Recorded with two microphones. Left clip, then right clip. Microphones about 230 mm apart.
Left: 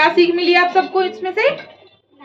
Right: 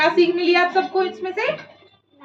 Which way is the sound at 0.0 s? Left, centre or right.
Centre.